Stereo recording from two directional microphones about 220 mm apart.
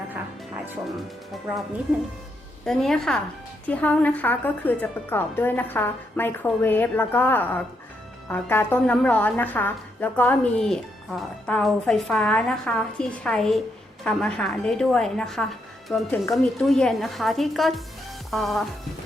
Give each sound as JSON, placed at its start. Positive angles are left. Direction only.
{"t": 2.6, "sound": "a woman's voice", "side_deg": 0}
{"t": 18.3, "sound": "music", "side_deg": 0}